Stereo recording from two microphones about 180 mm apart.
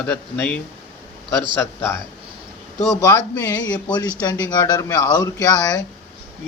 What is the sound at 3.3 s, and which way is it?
Speech, 20° left (ahead or behind).